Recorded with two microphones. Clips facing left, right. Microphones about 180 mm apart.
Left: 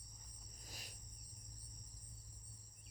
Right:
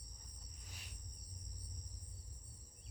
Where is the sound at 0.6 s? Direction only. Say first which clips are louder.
Left 2 dB; 40° left (ahead or behind).